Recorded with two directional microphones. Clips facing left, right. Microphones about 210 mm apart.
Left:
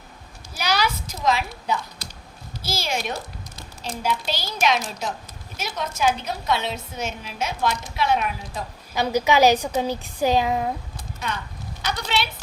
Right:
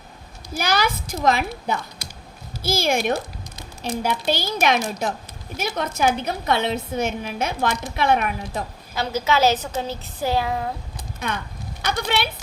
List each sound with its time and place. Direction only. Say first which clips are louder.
0.5 s a woman's voice: right 2 dB; 50° right (ahead or behind)
9.0 s a woman's voice: left 2 dB; 15° left (ahead or behind)
11.2 s a woman's voice: right 2 dB; 55° right (ahead or behind)